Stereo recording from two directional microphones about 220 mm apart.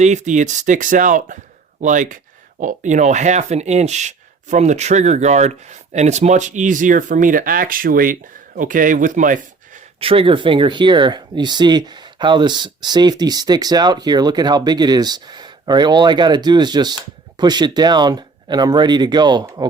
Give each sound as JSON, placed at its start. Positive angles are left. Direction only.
{"t": 0.0, "sound": "speech", "side_deg": -35}
{"t": 10.0, "sound": "speech", "side_deg": -25}